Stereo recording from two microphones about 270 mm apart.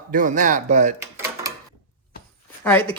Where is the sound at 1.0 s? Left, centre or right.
Centre.